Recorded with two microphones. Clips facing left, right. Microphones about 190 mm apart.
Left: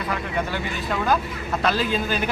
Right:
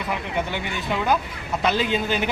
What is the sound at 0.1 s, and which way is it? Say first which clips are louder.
A man's voice: even; 15° right (ahead or behind).